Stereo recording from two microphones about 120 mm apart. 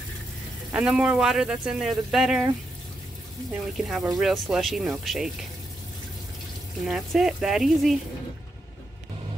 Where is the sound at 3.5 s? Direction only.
Centre (ahead or behind).